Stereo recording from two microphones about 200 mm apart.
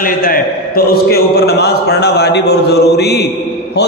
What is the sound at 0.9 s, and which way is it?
A man's voice, 50° left (ahead or behind).